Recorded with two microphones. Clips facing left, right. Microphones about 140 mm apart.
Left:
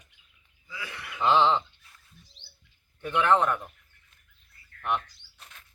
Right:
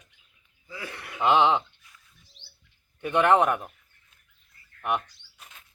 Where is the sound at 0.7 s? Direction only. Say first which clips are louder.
Right 2 dB; 45° right (ahead or behind).